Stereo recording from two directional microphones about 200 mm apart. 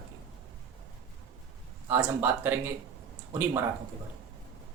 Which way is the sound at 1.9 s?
10° right (ahead or behind).